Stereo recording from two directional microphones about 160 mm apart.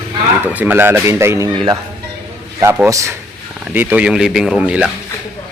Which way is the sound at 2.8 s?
20° right (ahead or behind).